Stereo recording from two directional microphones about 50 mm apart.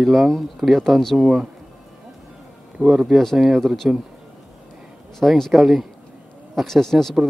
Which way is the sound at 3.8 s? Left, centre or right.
Right.